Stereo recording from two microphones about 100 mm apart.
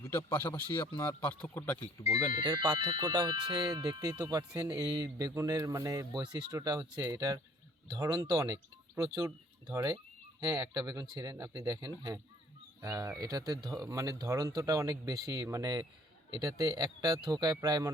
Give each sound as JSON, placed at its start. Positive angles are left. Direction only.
{"t": 0.0, "sound": "a man's voice", "side_deg": 25}
{"t": 2.4, "sound": "speech", "side_deg": -40}